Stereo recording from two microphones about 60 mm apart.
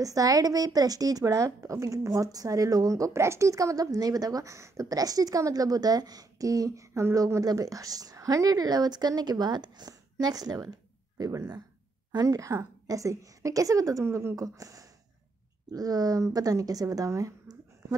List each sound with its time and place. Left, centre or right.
0.0 s a woman's voice: right
1.6 s a woman's voice: right
7.2 s a woman's voice: right
11.1 s speech: right
12.2 s a woman's voice: right
14.0 s a woman's voice: right
14.3 s a woman's voice: right
15.7 s a woman's voice: right